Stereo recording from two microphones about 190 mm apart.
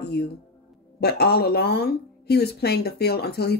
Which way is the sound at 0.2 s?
60° left (ahead or behind).